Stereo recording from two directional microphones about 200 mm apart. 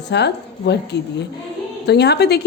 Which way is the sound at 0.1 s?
55° left (ahead or behind).